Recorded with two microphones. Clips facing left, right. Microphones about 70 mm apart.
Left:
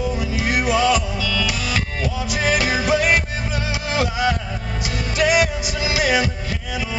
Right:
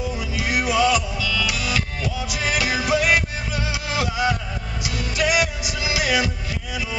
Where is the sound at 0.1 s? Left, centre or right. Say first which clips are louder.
Left 3 dB; left.